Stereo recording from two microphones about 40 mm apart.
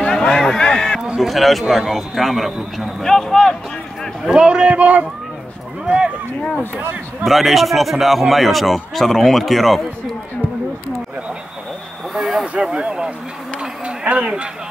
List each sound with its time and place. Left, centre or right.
0.0 s a sound: centre
1.2 s a man's voice: centre
3.0 s speech: centre
4.3 s a man's voice: right
6.8 s speech: right
7.2 s a man's voice: centre
12.2 s speech: centre
12.5 s a man's voice: right
13.6 s a sound: right